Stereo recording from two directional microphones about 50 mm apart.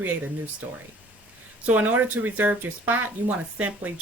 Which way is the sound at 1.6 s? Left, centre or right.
Right.